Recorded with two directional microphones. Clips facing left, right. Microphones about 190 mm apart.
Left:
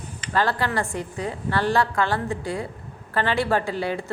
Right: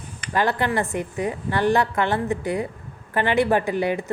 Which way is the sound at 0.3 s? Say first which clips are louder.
Right 2 dB; 20° right (ahead or behind).